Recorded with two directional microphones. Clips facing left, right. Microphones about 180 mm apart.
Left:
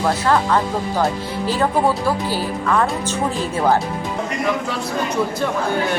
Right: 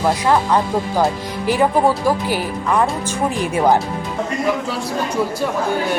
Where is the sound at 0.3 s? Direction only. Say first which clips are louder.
Right 1 dB; 15° right (ahead or behind).